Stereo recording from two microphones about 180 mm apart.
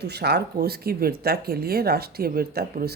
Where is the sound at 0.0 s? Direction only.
65° right (ahead or behind).